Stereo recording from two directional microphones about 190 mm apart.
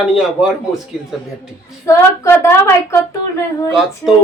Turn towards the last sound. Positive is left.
turn(degrees=15)  # may be behind; listen again after turning